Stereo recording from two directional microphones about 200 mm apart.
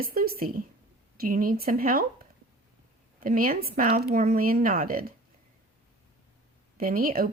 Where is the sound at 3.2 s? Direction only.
45° right (ahead or behind).